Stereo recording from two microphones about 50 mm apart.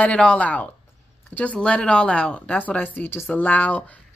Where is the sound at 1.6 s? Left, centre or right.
Centre.